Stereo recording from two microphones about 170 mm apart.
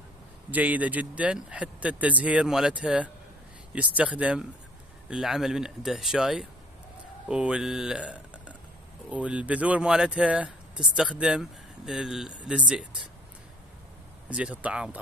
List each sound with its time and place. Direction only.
0.5 s speech: 10° right (ahead or behind)
14.3 s speech: 5° right (ahead or behind)